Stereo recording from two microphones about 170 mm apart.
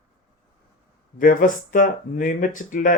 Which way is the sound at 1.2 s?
50° left (ahead or behind).